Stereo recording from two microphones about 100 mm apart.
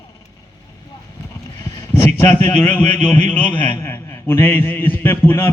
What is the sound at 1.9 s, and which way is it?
A man's voice, 20° left (ahead or behind).